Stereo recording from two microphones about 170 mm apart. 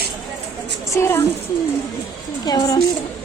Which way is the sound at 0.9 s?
15° left (ahead or behind).